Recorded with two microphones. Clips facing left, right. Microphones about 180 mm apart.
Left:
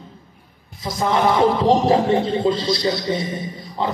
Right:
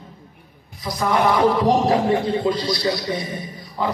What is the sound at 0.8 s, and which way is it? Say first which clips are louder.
Music: left 1 dB; 25° left (ahead or behind).